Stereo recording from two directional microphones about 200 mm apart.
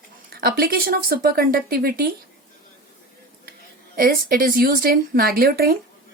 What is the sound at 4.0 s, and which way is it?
A woman's voice, 45° right (ahead or behind).